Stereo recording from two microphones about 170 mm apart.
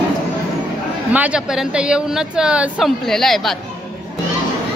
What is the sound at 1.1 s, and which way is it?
Speech, 5° right (ahead or behind).